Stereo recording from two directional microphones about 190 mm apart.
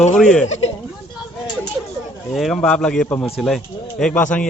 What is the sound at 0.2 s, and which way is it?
Speech, 5° left (ahead or behind).